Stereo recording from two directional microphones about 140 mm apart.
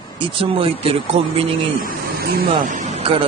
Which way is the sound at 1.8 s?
90° right.